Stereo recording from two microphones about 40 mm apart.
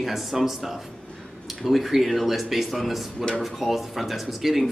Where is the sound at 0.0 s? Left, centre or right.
Centre.